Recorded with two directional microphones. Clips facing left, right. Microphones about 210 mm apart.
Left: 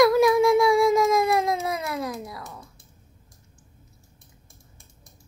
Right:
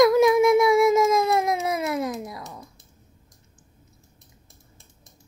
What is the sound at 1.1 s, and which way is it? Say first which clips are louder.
Baby cry: even; 20° right (ahead or behind).